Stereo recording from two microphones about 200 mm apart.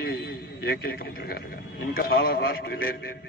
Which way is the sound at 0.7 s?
50° left (ahead or behind).